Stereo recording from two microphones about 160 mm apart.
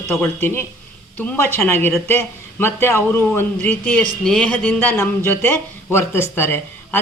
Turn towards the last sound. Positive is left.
turn(degrees=15)  # may be behind; listen again after turning